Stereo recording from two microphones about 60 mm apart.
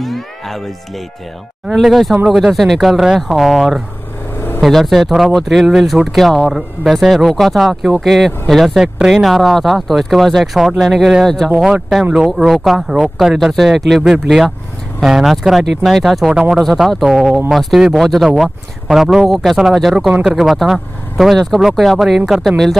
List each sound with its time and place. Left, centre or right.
0.0 s music: centre
1.7 s speech: centre
11.6 s speech: centre
20.1 s speech: centre
20.3 s speech: centre